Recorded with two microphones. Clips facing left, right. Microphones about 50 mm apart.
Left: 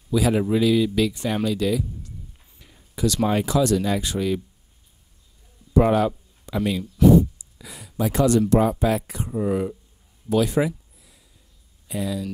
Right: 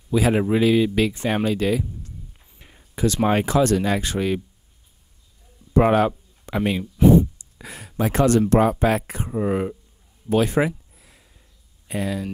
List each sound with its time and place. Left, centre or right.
0.1 s speech: right
2.6 s a sound: right
3.3 s speech: right
5.7 s speech: right
11.9 s speech: right